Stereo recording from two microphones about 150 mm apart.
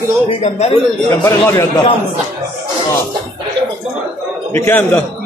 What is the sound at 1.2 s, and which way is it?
Speech, 20° left (ahead or behind).